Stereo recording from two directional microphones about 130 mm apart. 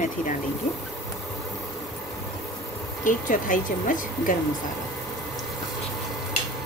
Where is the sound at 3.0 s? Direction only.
85° left.